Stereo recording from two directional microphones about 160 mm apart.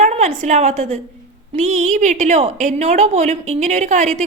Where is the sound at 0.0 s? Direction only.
40° right (ahead or behind).